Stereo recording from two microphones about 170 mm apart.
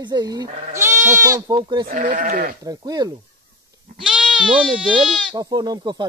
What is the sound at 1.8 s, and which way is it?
Speech, 50° right (ahead or behind).